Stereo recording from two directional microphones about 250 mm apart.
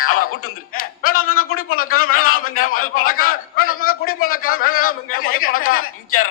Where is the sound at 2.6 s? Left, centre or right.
Left.